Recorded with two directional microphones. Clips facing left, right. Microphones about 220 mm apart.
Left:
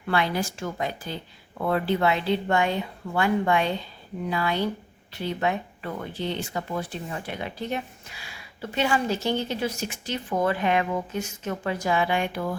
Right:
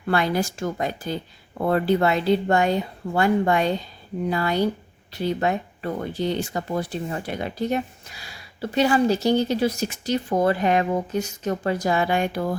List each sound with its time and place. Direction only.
0.0 s speech: 45° right (ahead or behind)